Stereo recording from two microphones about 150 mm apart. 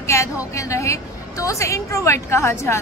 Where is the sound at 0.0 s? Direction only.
20° left (ahead or behind).